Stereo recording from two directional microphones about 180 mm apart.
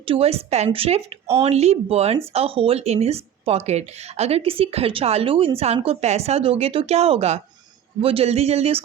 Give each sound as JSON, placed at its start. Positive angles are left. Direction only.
{"t": 0.0, "sound": "a woman's voice", "side_deg": -30}